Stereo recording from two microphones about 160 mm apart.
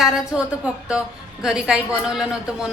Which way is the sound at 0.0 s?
5° right (ahead or behind).